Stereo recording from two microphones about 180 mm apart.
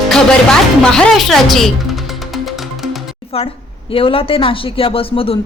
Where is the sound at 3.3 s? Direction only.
30° left (ahead or behind).